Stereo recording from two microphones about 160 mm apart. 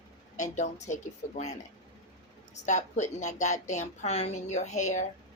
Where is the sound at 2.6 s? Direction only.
50° left (ahead or behind).